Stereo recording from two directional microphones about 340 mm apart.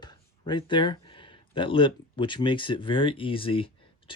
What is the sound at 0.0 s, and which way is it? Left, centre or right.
Speech, centre.